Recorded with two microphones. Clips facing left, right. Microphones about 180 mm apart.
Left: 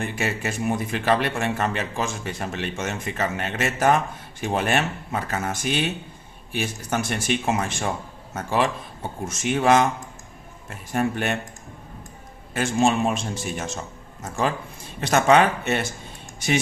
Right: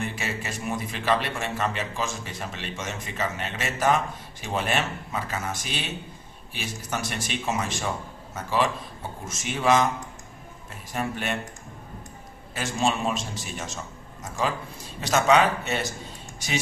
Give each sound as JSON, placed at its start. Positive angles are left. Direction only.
{"t": 0.0, "sound": "a man's voice", "side_deg": 55}
{"t": 10.9, "sound": "a man's voice", "side_deg": 50}
{"t": 12.5, "sound": "a man's voice", "side_deg": 55}